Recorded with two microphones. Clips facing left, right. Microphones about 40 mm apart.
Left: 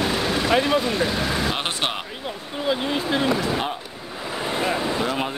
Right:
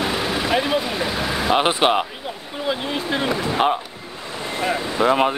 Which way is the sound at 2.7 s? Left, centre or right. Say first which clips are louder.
Left 1 dB; centre.